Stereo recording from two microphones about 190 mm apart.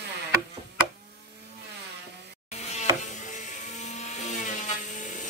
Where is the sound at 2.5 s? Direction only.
35° left (ahead or behind).